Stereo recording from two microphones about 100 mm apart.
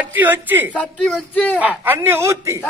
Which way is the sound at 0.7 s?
10° left (ahead or behind).